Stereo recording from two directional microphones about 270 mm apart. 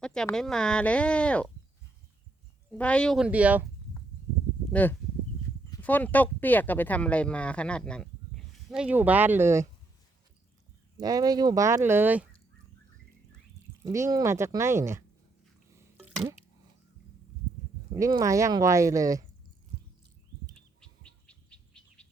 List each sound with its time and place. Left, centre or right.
0.0 s speech: centre
2.6 s speech: centre
4.7 s speech: centre
10.9 s speech: centre
13.8 s speech: centre
16.0 s a sound: centre
17.9 s speech: centre
20.8 s bird: centre